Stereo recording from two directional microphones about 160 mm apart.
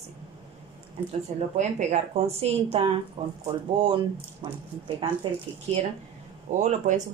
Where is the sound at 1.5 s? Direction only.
40° right (ahead or behind).